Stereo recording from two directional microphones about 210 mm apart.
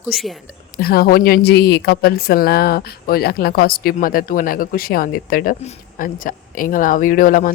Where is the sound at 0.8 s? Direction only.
45° left (ahead or behind).